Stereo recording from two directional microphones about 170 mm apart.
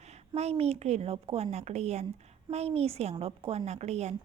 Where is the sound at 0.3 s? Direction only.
40° right (ahead or behind).